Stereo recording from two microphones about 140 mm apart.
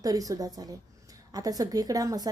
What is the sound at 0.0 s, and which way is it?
A woman's voice, 25° right (ahead or behind).